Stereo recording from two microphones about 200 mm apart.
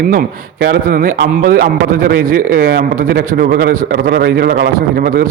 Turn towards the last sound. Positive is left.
turn(degrees=-50)  # may be behind; listen again after turning